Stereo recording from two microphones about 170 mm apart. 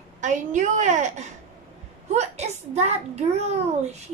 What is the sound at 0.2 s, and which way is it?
A woman's voice, 45° right (ahead or behind).